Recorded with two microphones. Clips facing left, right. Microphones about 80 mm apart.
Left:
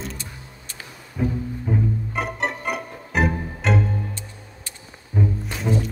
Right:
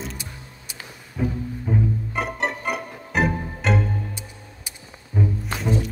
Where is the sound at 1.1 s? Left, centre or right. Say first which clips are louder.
Left 1 dB; centre.